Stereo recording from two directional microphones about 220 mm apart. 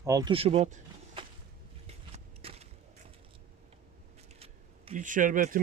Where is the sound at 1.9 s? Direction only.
30° right (ahead or behind).